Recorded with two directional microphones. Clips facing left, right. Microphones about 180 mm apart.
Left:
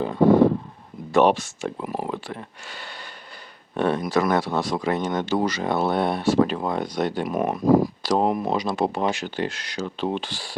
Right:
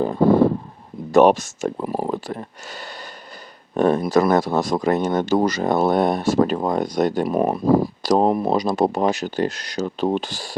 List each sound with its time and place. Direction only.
1.1 s speech: 45° right (ahead or behind)